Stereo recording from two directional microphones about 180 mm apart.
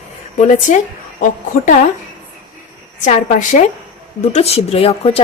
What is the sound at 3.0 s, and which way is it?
A woman's voice, 45° left (ahead or behind).